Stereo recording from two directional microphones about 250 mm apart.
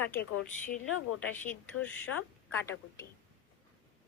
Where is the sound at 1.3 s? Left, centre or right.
Centre.